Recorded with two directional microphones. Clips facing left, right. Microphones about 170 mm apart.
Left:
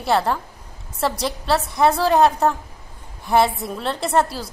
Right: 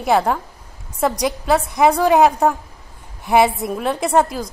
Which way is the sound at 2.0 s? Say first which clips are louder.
Right 3 dB; 10° right (ahead or behind).